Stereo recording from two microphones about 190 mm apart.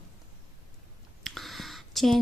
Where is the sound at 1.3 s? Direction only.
Centre (ahead or behind).